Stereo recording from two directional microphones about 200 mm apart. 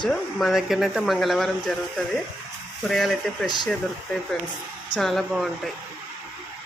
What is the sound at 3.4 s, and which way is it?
Speech, 20° left (ahead or behind).